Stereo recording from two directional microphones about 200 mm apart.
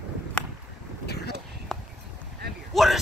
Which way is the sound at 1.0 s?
55° left (ahead or behind).